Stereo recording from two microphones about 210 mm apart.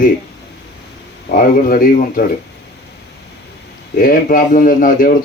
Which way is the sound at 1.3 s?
45° left (ahead or behind).